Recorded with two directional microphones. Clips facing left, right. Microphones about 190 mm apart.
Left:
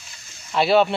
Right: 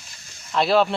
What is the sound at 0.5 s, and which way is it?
Speech, 5° left (ahead or behind).